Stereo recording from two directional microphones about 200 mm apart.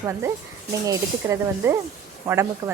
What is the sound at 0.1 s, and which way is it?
Speech, 15° right (ahead or behind).